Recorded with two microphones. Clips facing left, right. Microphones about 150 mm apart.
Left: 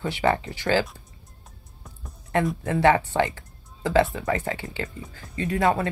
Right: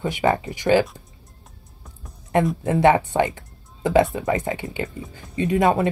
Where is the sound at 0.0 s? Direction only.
20° right (ahead or behind).